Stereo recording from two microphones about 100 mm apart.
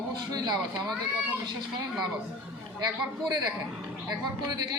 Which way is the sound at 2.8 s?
45° right (ahead or behind).